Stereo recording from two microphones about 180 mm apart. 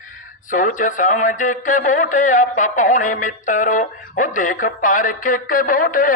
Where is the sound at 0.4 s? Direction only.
45° left (ahead or behind).